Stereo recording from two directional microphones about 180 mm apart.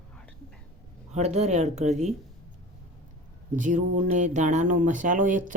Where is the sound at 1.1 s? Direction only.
40° right (ahead or behind).